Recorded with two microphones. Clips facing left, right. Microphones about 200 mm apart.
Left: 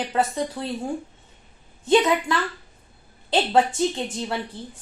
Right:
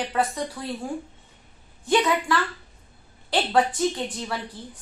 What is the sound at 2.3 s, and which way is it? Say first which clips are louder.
A woman's voice: even; 20° left (ahead or behind).